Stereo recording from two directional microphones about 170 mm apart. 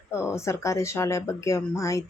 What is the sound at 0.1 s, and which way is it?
Speech, 15° left (ahead or behind).